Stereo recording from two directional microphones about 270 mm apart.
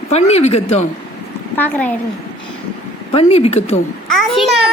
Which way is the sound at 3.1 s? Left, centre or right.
Left.